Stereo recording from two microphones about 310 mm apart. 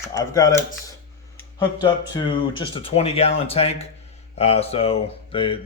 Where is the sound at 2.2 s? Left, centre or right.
Centre.